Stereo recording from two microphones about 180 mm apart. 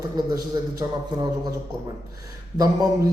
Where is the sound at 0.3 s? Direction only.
20° right (ahead or behind).